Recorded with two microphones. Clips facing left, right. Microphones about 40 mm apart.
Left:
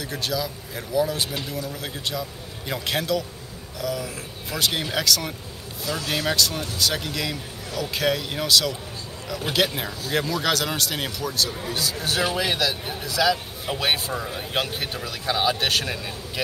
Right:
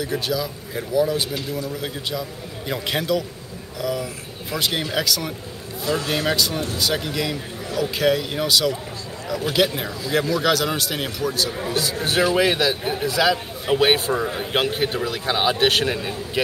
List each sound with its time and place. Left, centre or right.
0.0 s a man's voice: centre
11.8 s a man's voice: right